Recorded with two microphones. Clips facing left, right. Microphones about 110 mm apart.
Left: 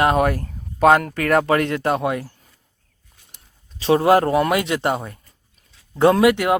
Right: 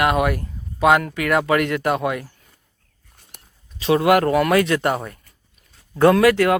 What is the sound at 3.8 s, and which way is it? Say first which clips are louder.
Speech: left 1 dB; 35° left (ahead or behind).